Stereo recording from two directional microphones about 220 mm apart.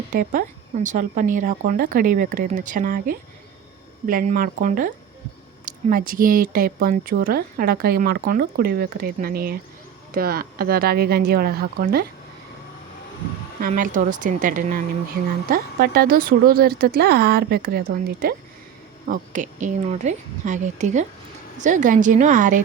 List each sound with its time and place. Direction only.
0.1 s speech: 40° right (ahead or behind)
13.6 s speech: 40° right (ahead or behind)